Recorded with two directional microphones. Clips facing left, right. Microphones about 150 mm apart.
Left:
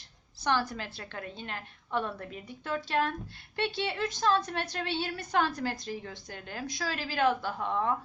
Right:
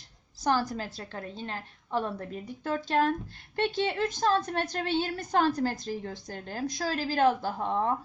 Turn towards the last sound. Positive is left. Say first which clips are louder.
# right 2 dB
turn(degrees=-35)  # may be behind; listen again after turning